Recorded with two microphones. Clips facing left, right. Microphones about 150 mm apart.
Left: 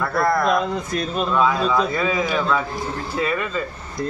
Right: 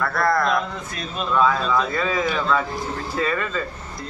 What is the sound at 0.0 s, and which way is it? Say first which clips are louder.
Speech: left 2 dB; 20° left (ahead or behind).